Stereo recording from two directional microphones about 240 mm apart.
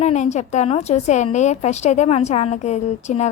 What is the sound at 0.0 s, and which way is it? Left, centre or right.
A woman's voice, left.